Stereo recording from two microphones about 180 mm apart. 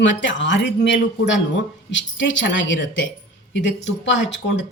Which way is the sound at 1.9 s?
90° left.